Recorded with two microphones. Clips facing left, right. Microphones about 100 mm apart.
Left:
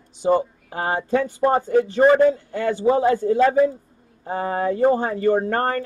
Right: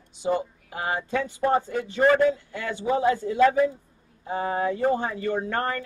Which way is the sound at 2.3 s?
40° left (ahead or behind).